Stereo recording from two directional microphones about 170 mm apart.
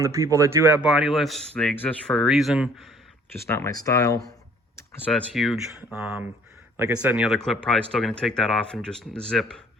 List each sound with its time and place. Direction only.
0.0 s speech: 20° right (ahead or behind); by 2.6 s centre (ahead or behind)
3.4 s speech: 15° left (ahead or behind)
4.8 s computer keyboard: 10° left (ahead or behind)
5.3 s speech: centre (ahead or behind)